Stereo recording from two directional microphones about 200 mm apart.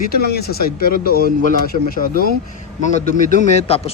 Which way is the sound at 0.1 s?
50° left (ahead or behind).